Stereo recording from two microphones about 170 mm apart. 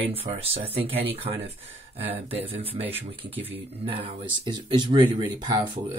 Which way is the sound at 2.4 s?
35° right (ahead or behind).